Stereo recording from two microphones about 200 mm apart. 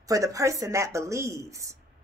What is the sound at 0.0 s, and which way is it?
Speech, 15° right (ahead or behind).